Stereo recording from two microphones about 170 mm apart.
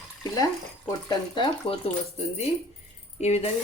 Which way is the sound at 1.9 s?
35° left (ahead or behind).